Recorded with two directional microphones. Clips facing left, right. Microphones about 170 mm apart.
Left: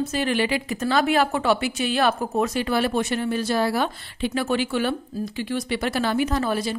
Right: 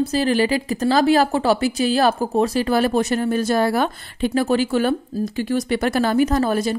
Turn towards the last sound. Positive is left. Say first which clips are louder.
# right 5 dB
turn(degrees=-45)  # may be behind; listen again after turning